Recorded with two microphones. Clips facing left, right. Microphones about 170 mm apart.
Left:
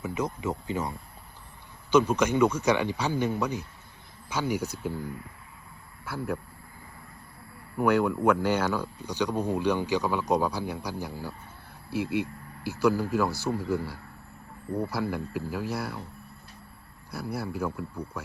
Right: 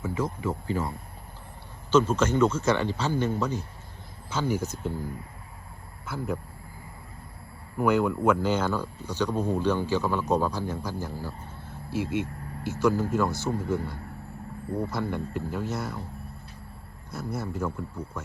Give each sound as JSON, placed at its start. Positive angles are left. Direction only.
{"t": 0.0, "sound": "speech", "side_deg": 20}
{"t": 6.1, "sound": "speech", "side_deg": 0}
{"t": 7.8, "sound": "speech", "side_deg": -5}
{"t": 8.4, "sound": "speech", "side_deg": 10}
{"t": 12.0, "sound": "speech", "side_deg": -50}
{"t": 12.8, "sound": "speech", "side_deg": 10}
{"t": 17.2, "sound": "speech", "side_deg": 10}